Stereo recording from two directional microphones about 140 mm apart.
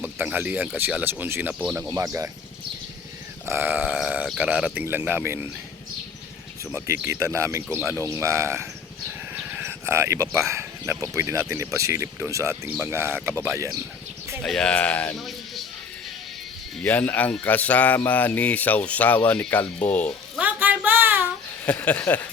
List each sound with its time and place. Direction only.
0.0 s speech: 10° right (ahead or behind)
3.4 s sheep: 15° right (ahead or behind)
4.4 s speech: 10° right (ahead or behind)
6.7 s speech: 15° right (ahead or behind)
14.4 s speech: 5° left (ahead or behind)
16.8 s speech: 10° left (ahead or behind)
20.4 s a sound: 10° right (ahead or behind)
21.7 s speech: 10° left (ahead or behind)